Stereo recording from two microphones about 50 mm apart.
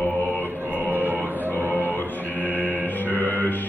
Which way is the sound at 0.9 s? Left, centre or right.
Right.